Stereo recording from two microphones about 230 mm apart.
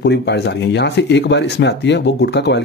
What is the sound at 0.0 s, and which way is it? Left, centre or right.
Speech, left.